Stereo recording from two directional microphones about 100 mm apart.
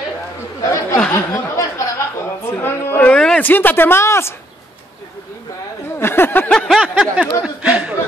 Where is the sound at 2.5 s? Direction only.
20° left (ahead or behind).